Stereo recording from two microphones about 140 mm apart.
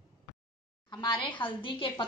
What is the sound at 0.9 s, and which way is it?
A woman's voice, 30° left (ahead or behind).